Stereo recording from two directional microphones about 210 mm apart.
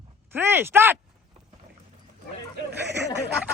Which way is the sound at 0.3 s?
10° right (ahead or behind).